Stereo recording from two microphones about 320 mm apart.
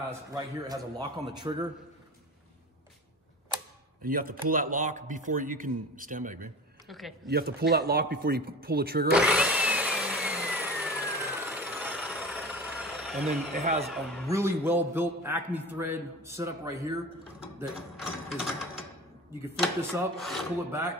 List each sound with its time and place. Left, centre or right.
0.3 s a man's voice: centre
4.0 s speech: right
6.9 s speech: centre
7.2 s speech: right
9.1 s a sound: centre
13.6 s speech: right
13.9 s speech: centre
14.3 s a man's voice: centre
17.4 s mechanisms: centre
19.6 s speech: centre